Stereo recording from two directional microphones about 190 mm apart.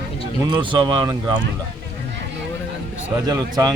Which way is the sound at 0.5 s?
25° right (ahead or behind).